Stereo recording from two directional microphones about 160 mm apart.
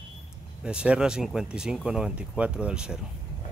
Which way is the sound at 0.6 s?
5° right (ahead or behind).